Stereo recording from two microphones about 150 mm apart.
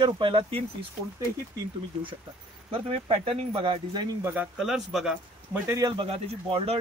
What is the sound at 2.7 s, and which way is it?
Speech, 40° right (ahead or behind).